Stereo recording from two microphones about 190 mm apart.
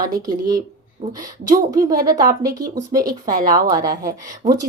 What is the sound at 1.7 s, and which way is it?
Speech, 20° right (ahead or behind).